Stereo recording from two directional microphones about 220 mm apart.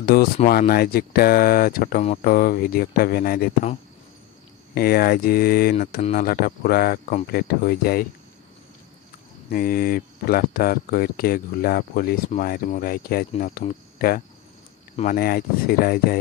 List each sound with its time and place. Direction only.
0.0 s speech: 45° left (ahead or behind)
4.7 s speech: 45° left (ahead or behind)
5.9 s speech: 30° left (ahead or behind)
6.2 s speech: 45° left (ahead or behind)
9.5 s speech: 40° left (ahead or behind)